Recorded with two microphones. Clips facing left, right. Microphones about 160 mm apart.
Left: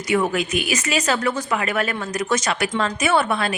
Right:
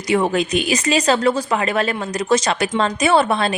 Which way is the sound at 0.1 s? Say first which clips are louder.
Right 3 dB; 35° right (ahead or behind).